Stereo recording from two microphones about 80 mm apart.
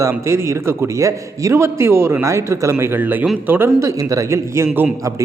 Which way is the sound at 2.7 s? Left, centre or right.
Right.